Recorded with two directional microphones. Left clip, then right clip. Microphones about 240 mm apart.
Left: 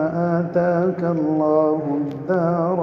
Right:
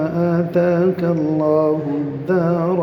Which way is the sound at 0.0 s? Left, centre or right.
Right.